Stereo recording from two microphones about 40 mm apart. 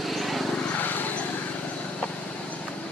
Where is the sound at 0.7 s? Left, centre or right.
Left.